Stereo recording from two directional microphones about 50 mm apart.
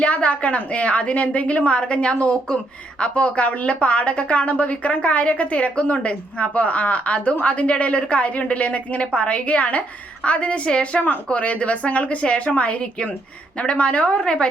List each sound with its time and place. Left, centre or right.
0.0 s a woman's voice: left